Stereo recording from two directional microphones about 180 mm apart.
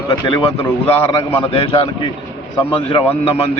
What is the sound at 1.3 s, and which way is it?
Speech, 30° left (ahead or behind).